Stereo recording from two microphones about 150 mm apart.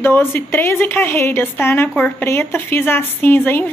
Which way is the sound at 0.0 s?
15° left (ahead or behind).